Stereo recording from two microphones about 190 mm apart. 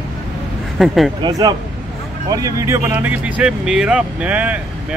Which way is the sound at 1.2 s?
20° right (ahead or behind).